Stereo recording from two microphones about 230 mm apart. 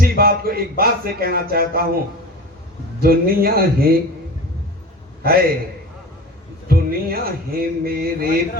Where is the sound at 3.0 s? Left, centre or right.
Right.